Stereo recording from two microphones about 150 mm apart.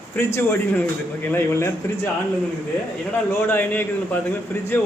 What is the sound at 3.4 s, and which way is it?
Speech, 15° left (ahead or behind).